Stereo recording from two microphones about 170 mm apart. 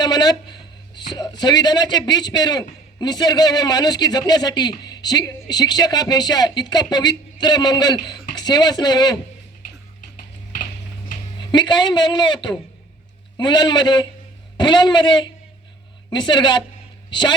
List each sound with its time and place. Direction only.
0.0 s a man's voice: 25° left (ahead or behind)
11.3 s a man's voice: 25° left (ahead or behind)